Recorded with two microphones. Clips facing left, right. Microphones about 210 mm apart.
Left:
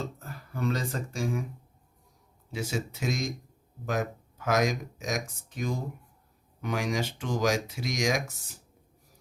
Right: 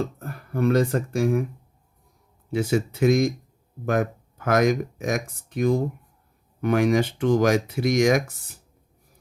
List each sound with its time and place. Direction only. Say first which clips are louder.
0.0 s speech: right 8 dB; 55° right (ahead or behind)
2.5 s speech: right 10 dB; 60° right (ahead or behind)